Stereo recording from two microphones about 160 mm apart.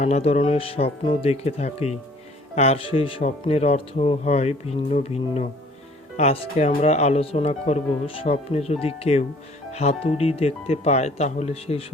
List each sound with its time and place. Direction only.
0.0 s speech: 45° left (ahead or behind)